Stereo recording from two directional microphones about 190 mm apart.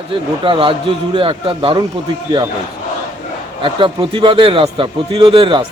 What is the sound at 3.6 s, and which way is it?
A man's voice, 25° right (ahead or behind).